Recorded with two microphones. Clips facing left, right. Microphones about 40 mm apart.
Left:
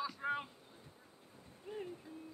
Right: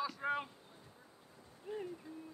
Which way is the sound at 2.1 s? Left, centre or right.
Left.